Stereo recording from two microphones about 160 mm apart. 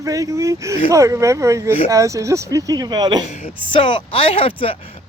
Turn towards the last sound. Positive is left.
turn(degrees=35)  # may be behind; listen again after turning